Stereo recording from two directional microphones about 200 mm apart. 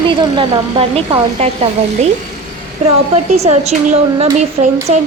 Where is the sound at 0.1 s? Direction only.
25° right (ahead or behind).